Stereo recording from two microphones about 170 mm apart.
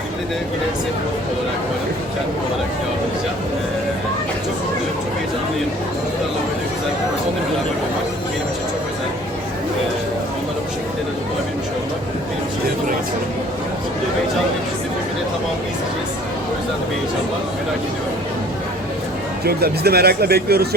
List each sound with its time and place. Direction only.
19.5 s speech: 65° right (ahead or behind)